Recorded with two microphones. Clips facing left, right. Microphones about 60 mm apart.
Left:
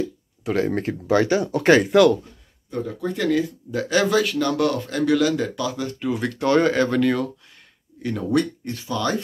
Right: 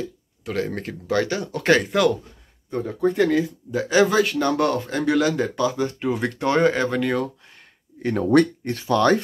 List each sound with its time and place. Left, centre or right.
0.4 s speech: centre
2.7 s speech: right
3.7 s speech: centre
8.0 s speech: right